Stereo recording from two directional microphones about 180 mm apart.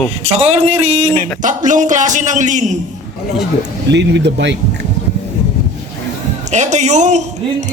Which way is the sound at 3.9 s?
75° right (ahead or behind).